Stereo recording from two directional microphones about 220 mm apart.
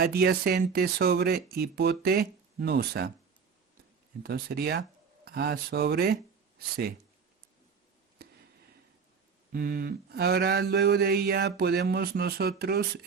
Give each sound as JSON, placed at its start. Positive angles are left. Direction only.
{"t": 0.0, "sound": "mantra", "side_deg": -45}
{"t": 4.2, "sound": "speech", "side_deg": -45}
{"t": 9.5, "sound": "mantra", "side_deg": -40}